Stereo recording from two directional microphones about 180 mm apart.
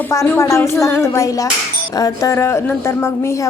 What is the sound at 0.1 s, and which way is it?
Speech, 15° left (ahead or behind).